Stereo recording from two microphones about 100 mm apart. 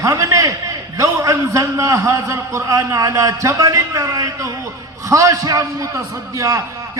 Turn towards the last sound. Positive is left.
turn(degrees=-30)  # may be behind; listen again after turning